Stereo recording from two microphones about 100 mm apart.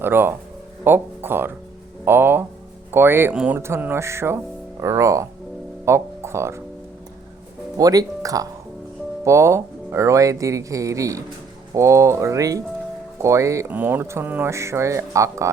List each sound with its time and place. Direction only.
0.0 s speech: 20° right (ahead or behind)
3.3 s speech: 10° right (ahead or behind)
3.6 s speech: 20° right (ahead or behind)
7.8 s speech: 35° right (ahead or behind)
13.7 s speech: 20° right (ahead or behind)